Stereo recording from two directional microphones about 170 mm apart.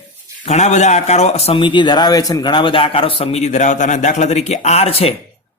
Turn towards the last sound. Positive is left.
turn(degrees=35)  # may be behind; listen again after turning